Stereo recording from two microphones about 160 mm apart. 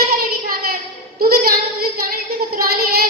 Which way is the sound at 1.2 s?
70° right (ahead or behind).